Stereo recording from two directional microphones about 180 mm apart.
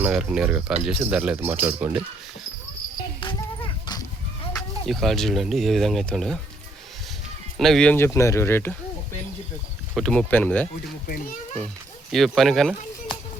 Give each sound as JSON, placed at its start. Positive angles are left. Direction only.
{"t": 0.0, "sound": "speech", "side_deg": -5}
{"t": 3.2, "sound": "a sound", "side_deg": 25}
{"t": 4.9, "sound": "speech", "side_deg": 0}
{"t": 7.6, "sound": "speech", "side_deg": 5}
{"t": 9.9, "sound": "speech", "side_deg": 5}
{"t": 12.1, "sound": "speech", "side_deg": 0}